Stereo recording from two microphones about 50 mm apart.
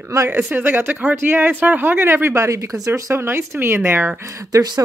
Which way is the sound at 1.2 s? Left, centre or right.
Right.